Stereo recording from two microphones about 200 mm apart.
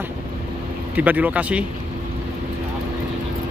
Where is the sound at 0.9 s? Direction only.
10° right (ahead or behind).